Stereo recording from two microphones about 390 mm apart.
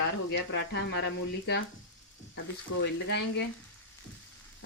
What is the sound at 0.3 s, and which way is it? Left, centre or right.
Speech, left.